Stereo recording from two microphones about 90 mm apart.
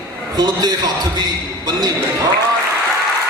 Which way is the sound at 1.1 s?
45° right (ahead or behind).